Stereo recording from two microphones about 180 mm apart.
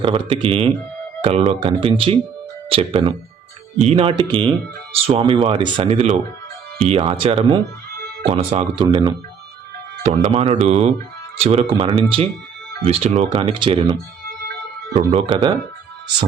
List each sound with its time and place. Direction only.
0.0 s speech: 30° right (ahead or behind)